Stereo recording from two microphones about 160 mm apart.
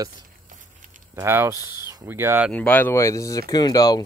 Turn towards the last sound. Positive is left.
turn(degrees=25)  # may be behind; listen again after turning